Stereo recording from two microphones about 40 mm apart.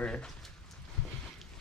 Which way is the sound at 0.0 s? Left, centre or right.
Left.